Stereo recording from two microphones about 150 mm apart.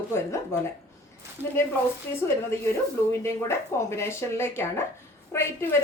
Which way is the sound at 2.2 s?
15° left (ahead or behind).